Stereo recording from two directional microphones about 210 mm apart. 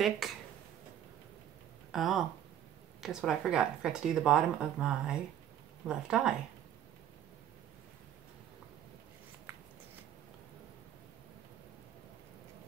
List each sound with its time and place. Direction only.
0.2 s speech: centre (ahead or behind)
1.9 s speech: centre (ahead or behind)